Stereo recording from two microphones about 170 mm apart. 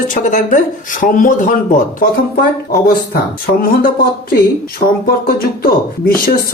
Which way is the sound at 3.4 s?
60° left (ahead or behind).